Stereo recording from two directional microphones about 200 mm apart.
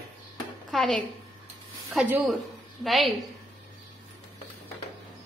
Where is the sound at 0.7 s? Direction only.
Centre (ahead or behind).